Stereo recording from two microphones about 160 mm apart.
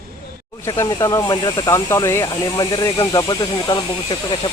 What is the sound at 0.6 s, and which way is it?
Speech, 25° left (ahead or behind).